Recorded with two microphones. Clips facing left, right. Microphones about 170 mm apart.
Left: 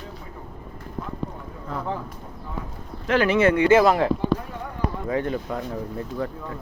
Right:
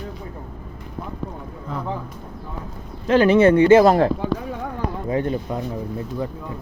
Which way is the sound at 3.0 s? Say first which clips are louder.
Right 5 dB; 30° right (ahead or behind).